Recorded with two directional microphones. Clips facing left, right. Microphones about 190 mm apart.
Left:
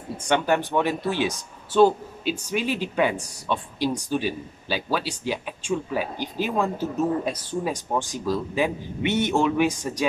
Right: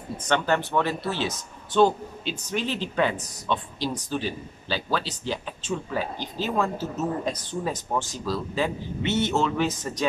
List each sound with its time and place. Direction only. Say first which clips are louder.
0.3 s speech: left 2 dB; 15° left (ahead or behind)